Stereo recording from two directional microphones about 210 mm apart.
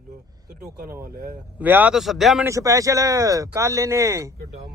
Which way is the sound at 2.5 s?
15° right (ahead or behind).